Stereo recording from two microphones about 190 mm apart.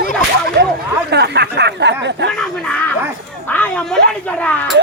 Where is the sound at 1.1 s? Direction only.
60° right (ahead or behind).